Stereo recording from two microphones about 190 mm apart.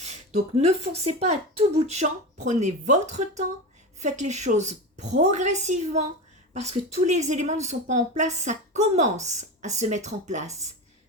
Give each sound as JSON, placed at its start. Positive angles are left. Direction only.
{"t": 0.0, "sound": "a woman's voice", "side_deg": -35}